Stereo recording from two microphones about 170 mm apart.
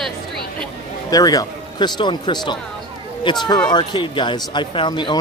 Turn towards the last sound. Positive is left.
turn(degrees=30)  # may be behind; listen again after turning